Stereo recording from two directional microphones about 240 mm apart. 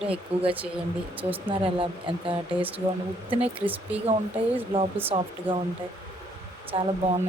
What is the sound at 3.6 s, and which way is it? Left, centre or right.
Speech, centre.